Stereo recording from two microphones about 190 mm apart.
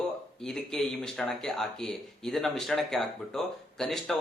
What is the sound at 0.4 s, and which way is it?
Speech, 5° left (ahead or behind).